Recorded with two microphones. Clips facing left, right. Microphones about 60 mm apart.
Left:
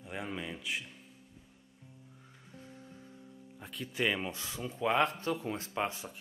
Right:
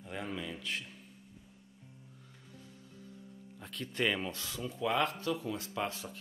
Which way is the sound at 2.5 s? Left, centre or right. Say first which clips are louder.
Left 4 dB; left.